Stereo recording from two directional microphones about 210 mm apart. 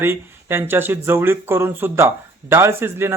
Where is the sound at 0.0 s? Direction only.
10° right (ahead or behind).